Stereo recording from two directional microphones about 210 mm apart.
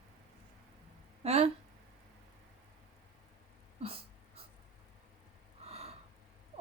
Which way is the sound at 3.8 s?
25° right (ahead or behind).